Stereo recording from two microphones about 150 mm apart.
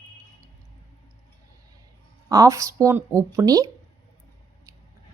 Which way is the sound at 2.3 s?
20° right (ahead or behind).